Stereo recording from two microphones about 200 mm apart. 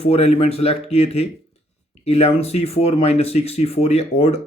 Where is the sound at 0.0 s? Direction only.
30° left (ahead or behind).